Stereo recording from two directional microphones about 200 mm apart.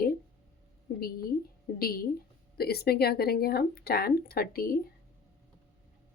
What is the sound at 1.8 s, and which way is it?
A woman's voice, 50° left (ahead or behind).